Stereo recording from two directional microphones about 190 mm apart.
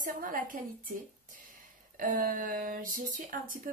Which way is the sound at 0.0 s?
45° right (ahead or behind).